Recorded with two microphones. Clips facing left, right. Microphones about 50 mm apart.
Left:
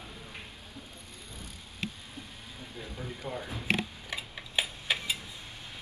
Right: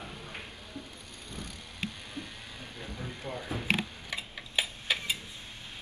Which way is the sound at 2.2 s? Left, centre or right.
Right.